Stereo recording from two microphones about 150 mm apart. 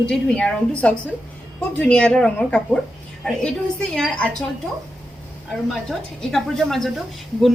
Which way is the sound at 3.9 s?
5° left (ahead or behind).